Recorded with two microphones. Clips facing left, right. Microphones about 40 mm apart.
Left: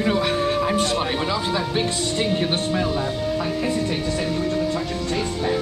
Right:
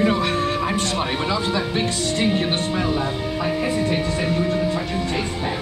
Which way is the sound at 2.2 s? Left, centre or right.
Centre.